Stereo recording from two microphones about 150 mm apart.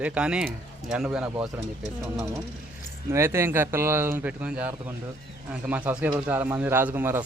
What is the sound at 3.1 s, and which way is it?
Speech, 15° right (ahead or behind).